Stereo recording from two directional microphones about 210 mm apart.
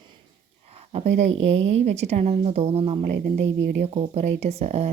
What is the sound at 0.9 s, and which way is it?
Speech, 30° right (ahead or behind).